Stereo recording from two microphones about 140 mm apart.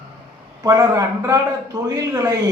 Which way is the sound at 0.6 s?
20° right (ahead or behind).